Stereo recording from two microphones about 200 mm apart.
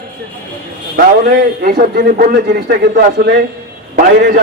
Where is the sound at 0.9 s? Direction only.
50° right (ahead or behind).